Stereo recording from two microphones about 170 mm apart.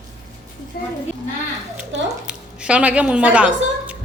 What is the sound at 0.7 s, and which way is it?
Speech, 60° left (ahead or behind).